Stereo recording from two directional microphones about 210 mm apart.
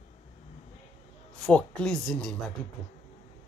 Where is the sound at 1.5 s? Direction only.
5° left (ahead or behind).